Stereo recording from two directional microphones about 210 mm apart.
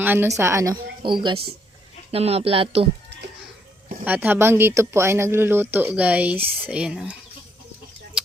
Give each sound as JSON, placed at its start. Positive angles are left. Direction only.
{"t": 0.0, "sound": "a woman's voice", "side_deg": -10}
{"t": 4.0, "sound": "a woman's voice", "side_deg": -10}